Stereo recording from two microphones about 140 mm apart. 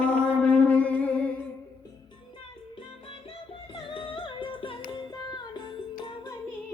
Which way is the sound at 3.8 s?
40° left (ahead or behind).